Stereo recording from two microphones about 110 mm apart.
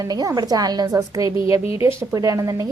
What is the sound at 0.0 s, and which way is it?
A woman's voice, 35° right (ahead or behind).